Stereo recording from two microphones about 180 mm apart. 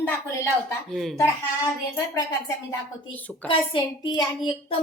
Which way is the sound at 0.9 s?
Centre (ahead or behind).